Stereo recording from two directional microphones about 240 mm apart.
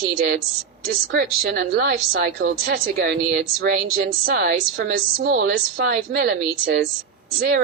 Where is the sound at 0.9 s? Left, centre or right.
Right.